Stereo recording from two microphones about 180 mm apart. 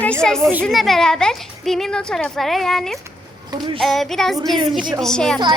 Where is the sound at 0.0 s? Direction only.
5° left (ahead or behind).